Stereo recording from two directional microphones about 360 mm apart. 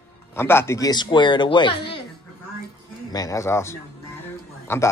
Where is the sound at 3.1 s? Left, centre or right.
Centre.